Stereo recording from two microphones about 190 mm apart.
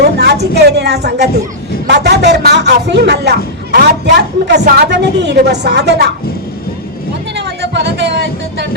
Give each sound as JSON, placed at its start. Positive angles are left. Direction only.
{"t": 0.0, "sound": "a sound", "side_deg": -60}
{"t": 0.5, "sound": "speech", "side_deg": -60}
{"t": 7.3, "sound": "speech", "side_deg": -60}